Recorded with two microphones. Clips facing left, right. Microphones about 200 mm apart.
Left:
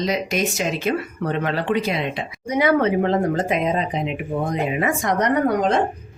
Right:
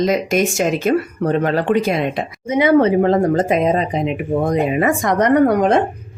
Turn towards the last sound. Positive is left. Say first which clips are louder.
# right 6 dB
turn(degrees=-55)  # may be behind; listen again after turning